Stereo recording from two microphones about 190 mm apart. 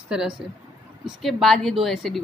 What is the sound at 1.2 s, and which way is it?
A woman's voice, centre (ahead or behind).